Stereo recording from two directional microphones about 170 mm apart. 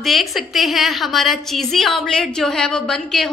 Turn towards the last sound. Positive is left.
turn(degrees=5)  # may be behind; listen again after turning